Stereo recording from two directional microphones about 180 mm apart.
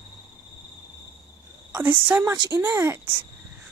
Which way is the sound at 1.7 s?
10° right (ahead or behind).